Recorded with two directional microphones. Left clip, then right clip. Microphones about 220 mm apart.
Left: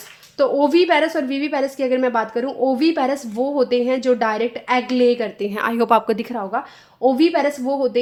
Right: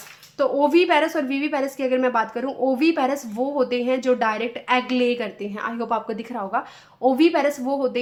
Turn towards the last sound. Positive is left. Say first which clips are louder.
# left 4 dB
turn(degrees=15)  # may be behind; listen again after turning